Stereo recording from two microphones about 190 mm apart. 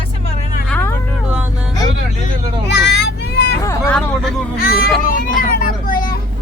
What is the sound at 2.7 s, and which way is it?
Vehicle, 60° left (ahead or behind).